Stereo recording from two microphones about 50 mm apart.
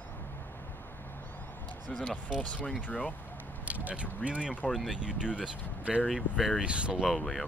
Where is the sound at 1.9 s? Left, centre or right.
Centre.